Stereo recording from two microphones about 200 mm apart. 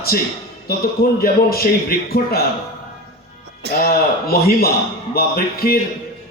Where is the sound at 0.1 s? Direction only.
50° left (ahead or behind).